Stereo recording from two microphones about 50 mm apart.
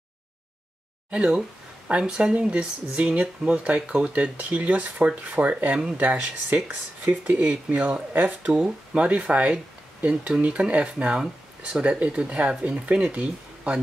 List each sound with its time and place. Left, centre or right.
1.1 s speech: right
8.3 s speech: right